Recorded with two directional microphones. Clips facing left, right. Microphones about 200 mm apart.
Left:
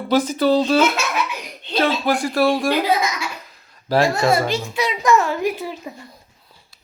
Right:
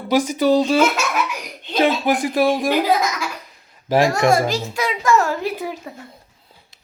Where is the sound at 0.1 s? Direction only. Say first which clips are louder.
Right 1 dB; 15° right (ahead or behind).